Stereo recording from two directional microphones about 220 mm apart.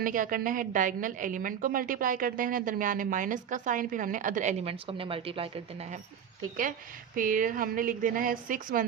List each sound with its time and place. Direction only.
0.0 s a woman's voice: 40° right (ahead or behind)
7.2 s a woman's voice: 40° right (ahead or behind)